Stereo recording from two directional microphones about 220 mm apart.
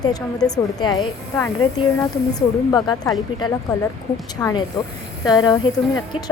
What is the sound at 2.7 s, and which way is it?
A woman's voice, 20° left (ahead or behind).